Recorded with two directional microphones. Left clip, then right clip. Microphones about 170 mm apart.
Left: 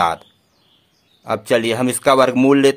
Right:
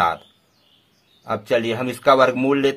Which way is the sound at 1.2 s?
35° left (ahead or behind).